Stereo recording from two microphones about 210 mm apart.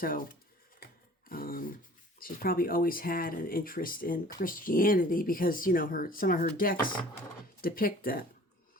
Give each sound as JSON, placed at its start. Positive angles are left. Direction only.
{"t": 0.0, "sound": "speech", "side_deg": 40}
{"t": 1.3, "sound": "a sound", "side_deg": 45}
{"t": 2.1, "sound": "speech", "side_deg": 45}